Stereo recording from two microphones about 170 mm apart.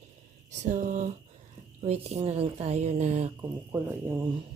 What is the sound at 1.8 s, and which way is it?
A woman's voice, 40° right (ahead or behind).